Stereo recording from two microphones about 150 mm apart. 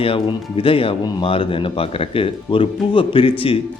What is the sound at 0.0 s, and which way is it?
Speech, 40° left (ahead or behind).